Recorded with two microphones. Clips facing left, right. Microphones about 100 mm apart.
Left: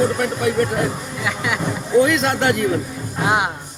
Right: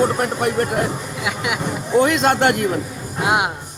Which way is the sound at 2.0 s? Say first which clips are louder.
Right 1 dB; 50° right (ahead or behind).